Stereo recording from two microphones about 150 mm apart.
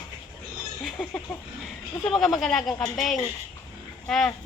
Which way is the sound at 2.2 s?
Centre (ahead or behind).